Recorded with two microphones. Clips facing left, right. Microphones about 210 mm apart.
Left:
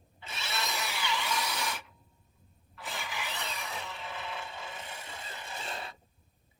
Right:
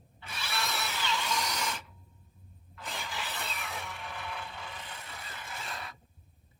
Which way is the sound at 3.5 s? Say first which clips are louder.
Even; 20° left (ahead or behind).